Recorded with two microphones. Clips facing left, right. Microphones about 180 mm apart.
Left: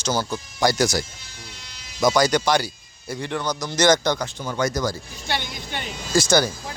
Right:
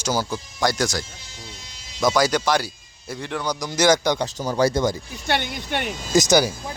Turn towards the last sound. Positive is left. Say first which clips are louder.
# right 2 dB
turn(degrees=-20)  # may be behind; listen again after turning